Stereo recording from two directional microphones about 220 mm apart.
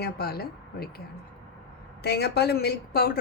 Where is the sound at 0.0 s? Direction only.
45° left (ahead or behind).